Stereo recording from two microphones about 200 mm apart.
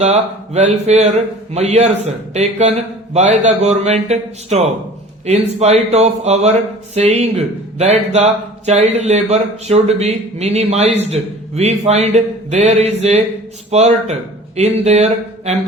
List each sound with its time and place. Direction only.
0.0 s speech: 35° right (ahead or behind)